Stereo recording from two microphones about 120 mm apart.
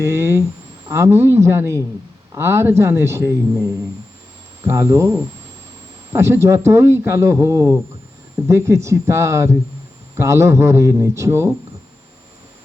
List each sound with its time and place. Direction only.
0.0 s speech: 20° right (ahead or behind)
4.6 s speech: 25° right (ahead or behind)